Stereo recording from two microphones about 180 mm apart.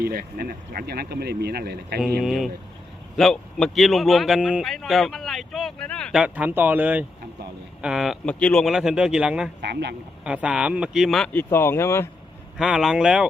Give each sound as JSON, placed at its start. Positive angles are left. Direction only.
{"t": 0.0, "sound": "speech", "side_deg": -55}
{"t": 2.2, "sound": "a man's voice", "side_deg": 0}
{"t": 9.6, "sound": "speech", "side_deg": -70}
{"t": 10.2, "sound": "a man's voice", "side_deg": -5}
{"t": 11.5, "sound": "speech", "side_deg": 15}
{"t": 12.5, "sound": "a man's voice", "side_deg": -5}